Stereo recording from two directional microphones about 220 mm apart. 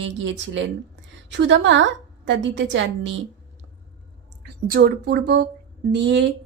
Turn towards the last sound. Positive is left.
turn(degrees=-50)  # may be behind; listen again after turning